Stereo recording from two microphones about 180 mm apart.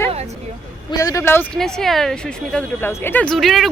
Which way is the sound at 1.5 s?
Centre (ahead or behind).